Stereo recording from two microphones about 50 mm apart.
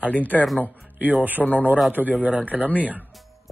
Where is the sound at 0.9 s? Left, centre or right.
Right.